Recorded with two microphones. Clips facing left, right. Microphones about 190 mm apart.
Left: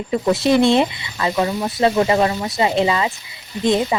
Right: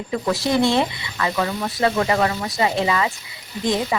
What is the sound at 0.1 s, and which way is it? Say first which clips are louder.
Speech: left 5 dB; 25° left (ahead or behind).